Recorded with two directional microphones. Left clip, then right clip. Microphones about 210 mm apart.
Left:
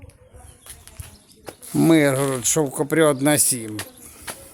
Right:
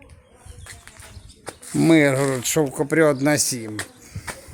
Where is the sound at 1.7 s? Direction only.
5° left (ahead or behind).